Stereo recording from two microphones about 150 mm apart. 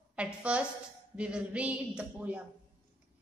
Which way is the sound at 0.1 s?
10° right (ahead or behind).